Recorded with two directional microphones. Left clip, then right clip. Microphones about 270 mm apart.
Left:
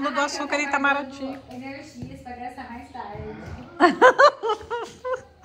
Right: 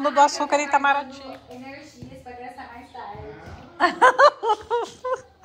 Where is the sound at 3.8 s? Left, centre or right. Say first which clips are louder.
Left 1 dB; centre.